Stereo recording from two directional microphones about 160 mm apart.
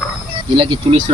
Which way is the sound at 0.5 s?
35° right (ahead or behind).